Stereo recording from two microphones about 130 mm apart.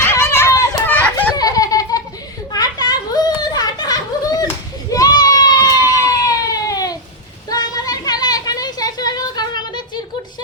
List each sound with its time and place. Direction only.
0.0 s children playing: 20° left (ahead or behind)
0.9 s children playing: 15° left (ahead or behind)
1.4 s baby laughter: 30° left (ahead or behind)
2.5 s a sound: 30° left (ahead or behind)